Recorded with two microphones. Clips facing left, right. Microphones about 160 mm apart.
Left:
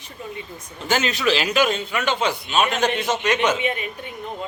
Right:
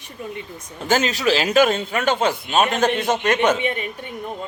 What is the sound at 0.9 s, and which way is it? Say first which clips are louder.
A man's voice: right 2 dB; 35° right (ahead or behind).